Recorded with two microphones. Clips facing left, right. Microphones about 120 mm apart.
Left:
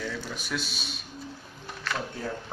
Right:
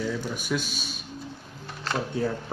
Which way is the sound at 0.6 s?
50° right (ahead or behind).